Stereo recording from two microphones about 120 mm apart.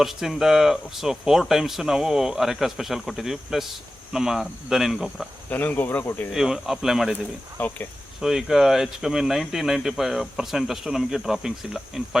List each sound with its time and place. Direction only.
0.0 s speech: centre (ahead or behind)
5.5 s speech: 15° left (ahead or behind)
6.3 s speech: 5° right (ahead or behind)
7.6 s speech: 15° left (ahead or behind)
8.2 s speech: 5° right (ahead or behind)